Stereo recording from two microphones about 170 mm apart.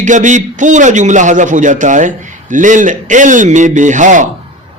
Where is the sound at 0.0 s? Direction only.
45° right (ahead or behind).